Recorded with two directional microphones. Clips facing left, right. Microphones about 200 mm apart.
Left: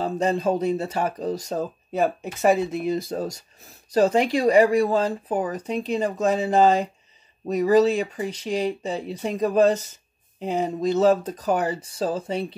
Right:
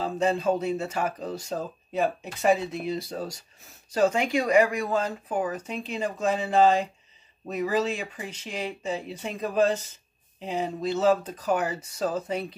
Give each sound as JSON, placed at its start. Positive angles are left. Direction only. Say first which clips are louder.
{"t": 0.0, "sound": "speech", "louder": "left 2 dB", "side_deg": 40}